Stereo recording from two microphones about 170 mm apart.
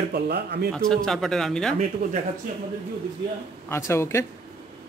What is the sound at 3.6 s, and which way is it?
Speech, 15° left (ahead or behind).